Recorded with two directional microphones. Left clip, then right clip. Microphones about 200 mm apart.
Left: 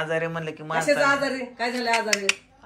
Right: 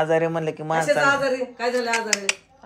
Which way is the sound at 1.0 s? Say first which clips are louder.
Right 2 dB; 30° right (ahead or behind).